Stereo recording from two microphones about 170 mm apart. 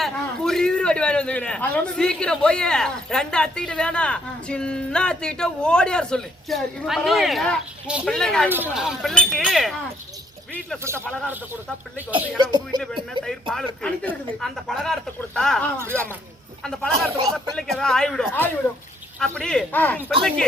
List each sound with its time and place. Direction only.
0.0 s a man's voice: 5° left (ahead or behind)
8.4 s a man's voice: 10° right (ahead or behind)
11.0 s speech: 5° left (ahead or behind)
12.4 s speech: 25° right (ahead or behind)
13.5 s a man's voice: 5° left (ahead or behind)
15.8 s speech: 15° right (ahead or behind)
16.6 s a man's voice: 5° left (ahead or behind)